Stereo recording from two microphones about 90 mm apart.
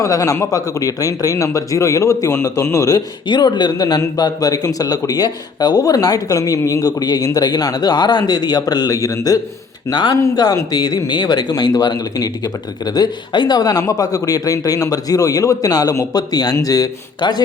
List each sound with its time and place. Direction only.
0.0 s speech: 35° left (ahead or behind)
3.2 s a man's voice: 55° left (ahead or behind)
9.9 s a man's voice: 55° left (ahead or behind)